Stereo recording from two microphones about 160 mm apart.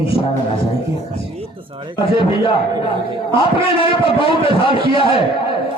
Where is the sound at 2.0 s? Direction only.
35° left (ahead or behind).